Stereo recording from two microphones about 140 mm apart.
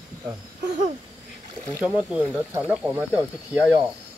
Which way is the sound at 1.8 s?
5° right (ahead or behind).